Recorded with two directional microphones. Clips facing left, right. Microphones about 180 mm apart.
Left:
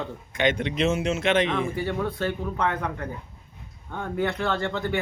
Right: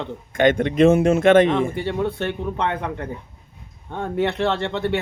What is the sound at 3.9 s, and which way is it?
Speech, 25° right (ahead or behind).